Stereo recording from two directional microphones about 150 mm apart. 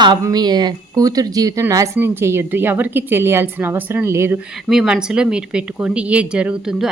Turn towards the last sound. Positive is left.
turn(degrees=-5)  # may be behind; listen again after turning